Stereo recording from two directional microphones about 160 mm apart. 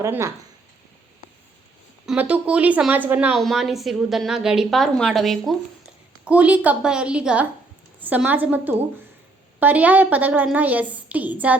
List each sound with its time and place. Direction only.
0.0 s a woman's voice: 15° right (ahead or behind)
2.0 s a woman's voice: 10° right (ahead or behind)
6.2 s a woman's voice: 10° right (ahead or behind)